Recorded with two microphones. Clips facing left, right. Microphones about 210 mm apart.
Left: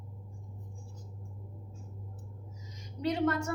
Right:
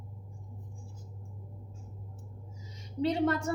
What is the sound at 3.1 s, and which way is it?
Speech, 30° right (ahead or behind).